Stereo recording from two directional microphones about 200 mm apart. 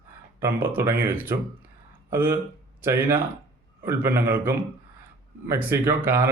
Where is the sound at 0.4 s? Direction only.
10° right (ahead or behind).